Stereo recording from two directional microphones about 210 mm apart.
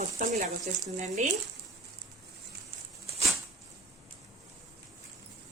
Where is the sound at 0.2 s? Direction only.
35° right (ahead or behind).